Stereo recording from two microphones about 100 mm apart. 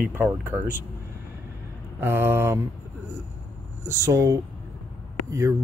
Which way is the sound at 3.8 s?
30° right (ahead or behind).